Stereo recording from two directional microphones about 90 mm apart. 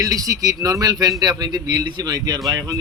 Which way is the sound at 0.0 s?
40° right (ahead or behind).